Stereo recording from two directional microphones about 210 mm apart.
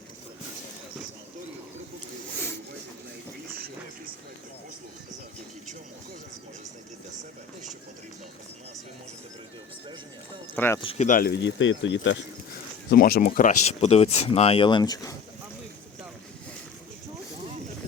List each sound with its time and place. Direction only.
10.5 s speech: 10° left (ahead or behind)
10.8 s speech: 30° left (ahead or behind); by 12.2 s 60° left (ahead or behind)
12.9 s speech: 45° left (ahead or behind); by 15.1 s 15° left (ahead or behind)